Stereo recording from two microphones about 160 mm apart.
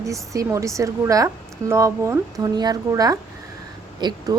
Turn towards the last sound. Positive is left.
turn(degrees=-25)  # may be behind; listen again after turning